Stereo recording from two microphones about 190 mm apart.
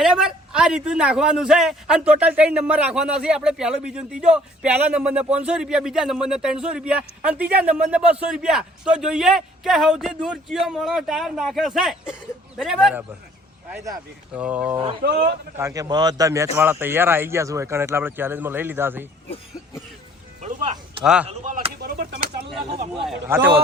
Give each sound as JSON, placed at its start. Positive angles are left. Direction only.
{"t": 0.0, "sound": "a man's voice", "side_deg": -5}
{"t": 13.7, "sound": "a man's voice", "side_deg": -15}
{"t": 14.3, "sound": "a man's voice", "side_deg": -5}
{"t": 15.0, "sound": "speech", "side_deg": -60}
{"t": 15.5, "sound": "a man's voice", "side_deg": -15}
{"t": 20.4, "sound": "a sound", "side_deg": -35}
{"t": 21.0, "sound": "a man's voice", "side_deg": -5}
{"t": 21.2, "sound": "speech", "side_deg": -35}
{"t": 21.8, "sound": "a sound", "side_deg": -50}
{"t": 23.2, "sound": "a man's voice", "side_deg": -10}